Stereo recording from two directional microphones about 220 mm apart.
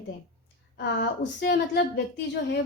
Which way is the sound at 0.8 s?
50° left (ahead or behind).